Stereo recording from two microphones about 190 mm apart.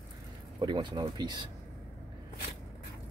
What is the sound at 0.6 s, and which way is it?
Speech, 25° right (ahead or behind).